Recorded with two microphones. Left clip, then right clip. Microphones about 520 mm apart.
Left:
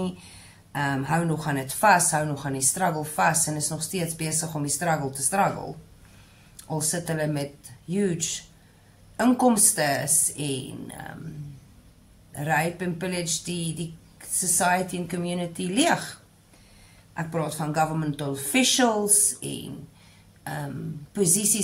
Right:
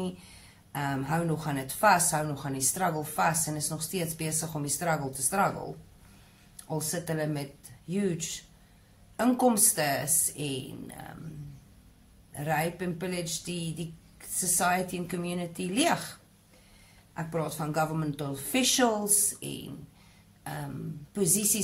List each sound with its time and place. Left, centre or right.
0.7 s a woman's voice: right
6.7 s a woman's voice: right
12.4 s a woman's voice: right
21.1 s a woman's voice: right